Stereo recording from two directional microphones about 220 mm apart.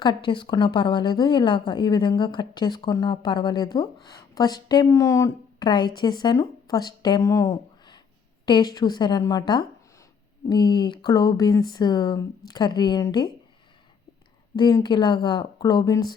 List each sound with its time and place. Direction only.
0.0 s a woman's voice: 20° left (ahead or behind)
14.5 s a woman's voice: 20° left (ahead or behind)